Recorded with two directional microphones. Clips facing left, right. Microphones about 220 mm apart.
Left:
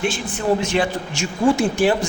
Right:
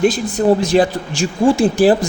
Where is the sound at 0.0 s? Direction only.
40° right (ahead or behind).